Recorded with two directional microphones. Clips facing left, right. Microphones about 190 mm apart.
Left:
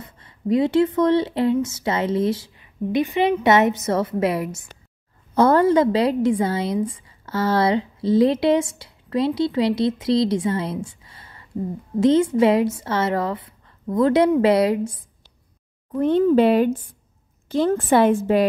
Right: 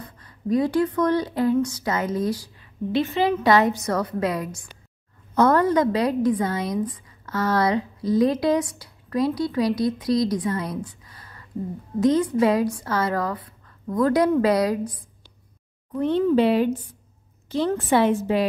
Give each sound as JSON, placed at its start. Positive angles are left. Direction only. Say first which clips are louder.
{"t": 0.0, "sound": "a woman's voice", "louder": "left 3 dB", "side_deg": 25}
{"t": 15.9, "sound": "a woman's voice", "louder": "left 3 dB", "side_deg": 50}